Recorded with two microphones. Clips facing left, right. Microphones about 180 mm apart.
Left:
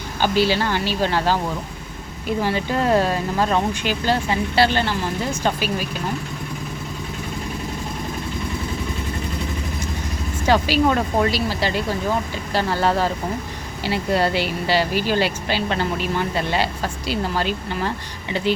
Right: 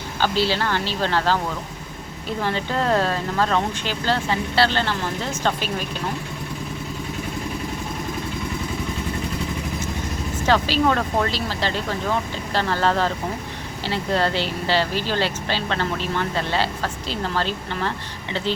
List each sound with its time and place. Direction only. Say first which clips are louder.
0.2 s speech: left 3 dB; 15° left (ahead or behind)
2.4 s speech: left 2 dB; 10° left (ahead or behind)
10.4 s speech: left 2 dB; 10° left (ahead or behind)